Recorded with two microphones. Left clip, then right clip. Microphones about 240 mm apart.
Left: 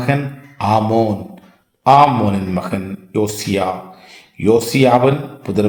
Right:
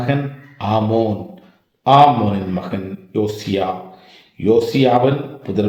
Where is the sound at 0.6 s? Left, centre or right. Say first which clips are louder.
Left 3 dB; left.